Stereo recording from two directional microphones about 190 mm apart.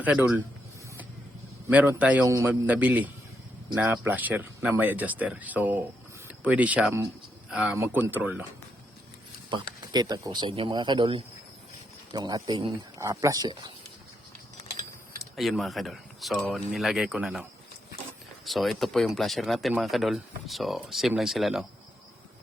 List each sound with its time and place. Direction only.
0.0 s speech: 10° right (ahead or behind)
2.0 s speech: 5° right (ahead or behind)
9.9 s speech: 20° right (ahead or behind)
15.4 s speech: centre (ahead or behind)
18.4 s speech: centre (ahead or behind)